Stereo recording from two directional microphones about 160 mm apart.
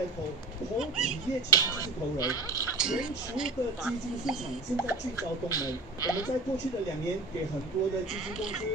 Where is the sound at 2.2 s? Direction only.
20° left (ahead or behind).